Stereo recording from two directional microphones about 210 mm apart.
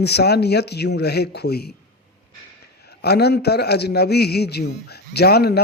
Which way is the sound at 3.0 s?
50° left (ahead or behind).